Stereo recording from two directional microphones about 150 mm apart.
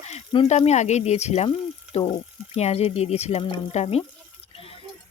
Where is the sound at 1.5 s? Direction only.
35° left (ahead or behind).